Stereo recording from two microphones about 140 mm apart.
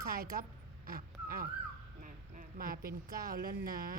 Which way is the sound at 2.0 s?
80° right.